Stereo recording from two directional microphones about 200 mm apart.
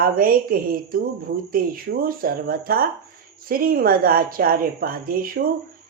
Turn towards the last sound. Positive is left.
turn(degrees=-45)  # may be behind; listen again after turning